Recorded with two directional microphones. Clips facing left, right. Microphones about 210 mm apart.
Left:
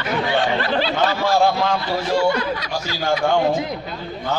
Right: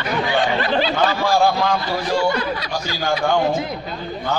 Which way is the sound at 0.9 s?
25° left (ahead or behind).